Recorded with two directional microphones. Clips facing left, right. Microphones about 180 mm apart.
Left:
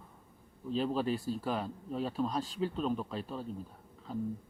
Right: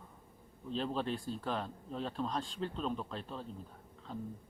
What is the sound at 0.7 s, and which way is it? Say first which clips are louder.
Speech: left 4 dB; 5° left (ahead or behind).